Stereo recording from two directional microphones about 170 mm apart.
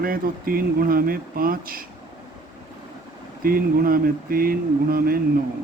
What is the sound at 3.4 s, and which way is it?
Speech, 60° right (ahead or behind).